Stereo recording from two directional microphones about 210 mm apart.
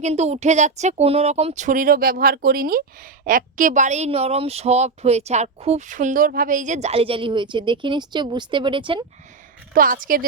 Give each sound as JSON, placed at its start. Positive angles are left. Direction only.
{"t": 0.0, "sound": "a woman's voice", "side_deg": -30}
{"t": 9.7, "sound": "speech", "side_deg": -40}